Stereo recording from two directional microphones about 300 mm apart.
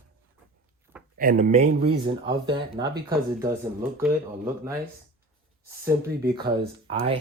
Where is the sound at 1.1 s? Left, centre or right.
Right.